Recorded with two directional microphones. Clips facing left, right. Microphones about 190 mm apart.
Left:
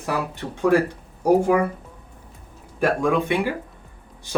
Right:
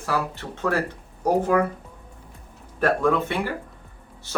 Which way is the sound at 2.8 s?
15° left (ahead or behind).